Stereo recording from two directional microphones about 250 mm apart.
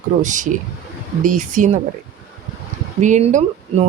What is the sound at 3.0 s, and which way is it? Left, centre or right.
Speech, right.